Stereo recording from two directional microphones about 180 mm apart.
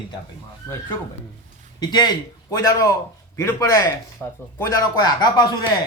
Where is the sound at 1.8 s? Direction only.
25° left (ahead or behind).